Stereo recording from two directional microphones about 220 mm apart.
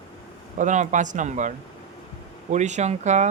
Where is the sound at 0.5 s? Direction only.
35° right (ahead or behind).